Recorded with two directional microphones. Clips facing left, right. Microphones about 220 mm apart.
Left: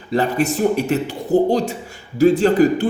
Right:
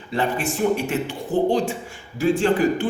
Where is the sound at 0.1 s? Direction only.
40° left (ahead or behind).